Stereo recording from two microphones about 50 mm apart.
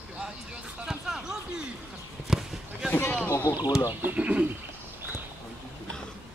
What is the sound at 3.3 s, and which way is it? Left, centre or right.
Speech, left.